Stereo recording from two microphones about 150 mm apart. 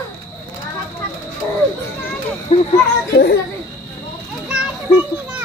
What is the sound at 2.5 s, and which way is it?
Speech, 45° left (ahead or behind).